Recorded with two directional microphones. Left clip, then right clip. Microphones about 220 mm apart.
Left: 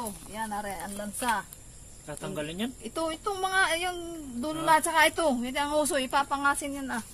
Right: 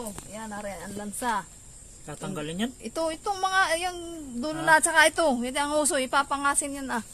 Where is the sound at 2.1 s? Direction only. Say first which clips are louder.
Even; 45° right (ahead or behind).